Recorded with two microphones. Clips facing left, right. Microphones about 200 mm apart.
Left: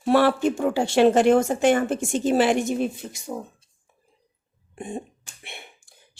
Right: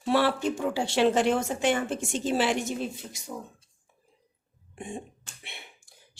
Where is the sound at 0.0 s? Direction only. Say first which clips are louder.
Left 6 dB; 50° left (ahead or behind).